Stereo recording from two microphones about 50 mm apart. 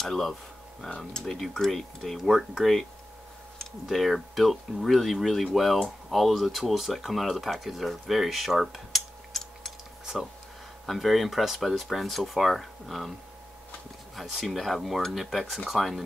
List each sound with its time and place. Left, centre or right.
0.0 s speech: centre
0.8 s speech: left
1.2 s speech: centre
3.8 s speech: centre
10.9 s speech: centre
14.1 s speech: centre